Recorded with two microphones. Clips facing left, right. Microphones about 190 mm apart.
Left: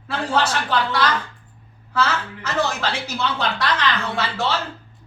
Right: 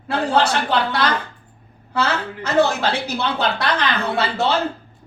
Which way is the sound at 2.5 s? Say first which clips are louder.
Right 6 dB; 60° right (ahead or behind).